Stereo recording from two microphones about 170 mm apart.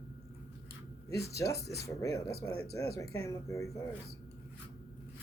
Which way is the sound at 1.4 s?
15° left (ahead or behind).